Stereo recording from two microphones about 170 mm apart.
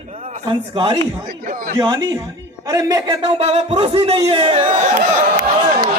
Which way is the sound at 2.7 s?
20° right (ahead or behind).